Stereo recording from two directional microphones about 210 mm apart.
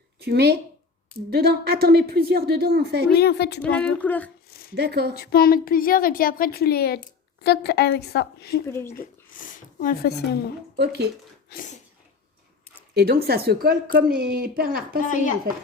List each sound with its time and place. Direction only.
0.2 s a woman's voice: 50° right (ahead or behind)
3.2 s a woman's voice: 50° left (ahead or behind)
3.6 s speech: 5° left (ahead or behind)
4.4 s a sound: 45° left (ahead or behind)
4.7 s a woman's voice: 50° right (ahead or behind)
5.1 s a woman's voice: 45° left (ahead or behind)
8.6 s speech: 10° left (ahead or behind)
9.4 s a woman's voice: 40° left (ahead or behind)
10.8 s a woman's voice: 50° right (ahead or behind)
11.4 s a sound: 40° left (ahead or behind)
12.9 s a woman's voice: 50° right (ahead or behind)
15.0 s speech: 35° left (ahead or behind)